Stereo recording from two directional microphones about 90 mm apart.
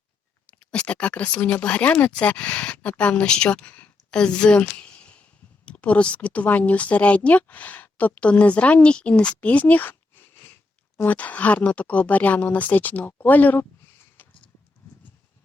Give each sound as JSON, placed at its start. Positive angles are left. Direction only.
{"t": 0.4, "sound": "a woman's voice", "side_deg": 10}